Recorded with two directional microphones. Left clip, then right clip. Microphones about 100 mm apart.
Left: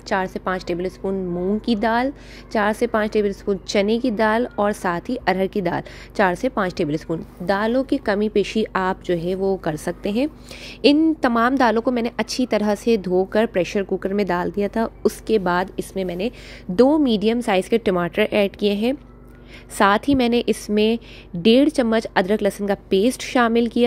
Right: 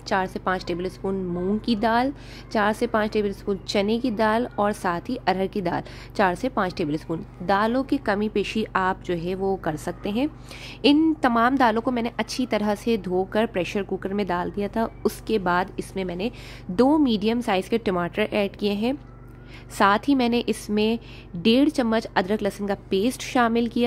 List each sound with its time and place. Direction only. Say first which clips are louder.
0.0 s a woman's voice: left 2 dB; 25° left (ahead or behind)